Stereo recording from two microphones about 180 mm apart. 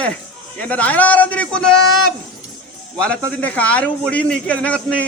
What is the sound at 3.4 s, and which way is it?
A man's voice, 10° left (ahead or behind).